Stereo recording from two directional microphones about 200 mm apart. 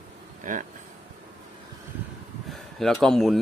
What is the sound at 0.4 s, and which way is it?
Speech, 40° right (ahead or behind).